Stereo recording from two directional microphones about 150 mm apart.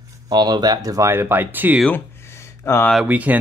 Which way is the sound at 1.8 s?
15° left (ahead or behind).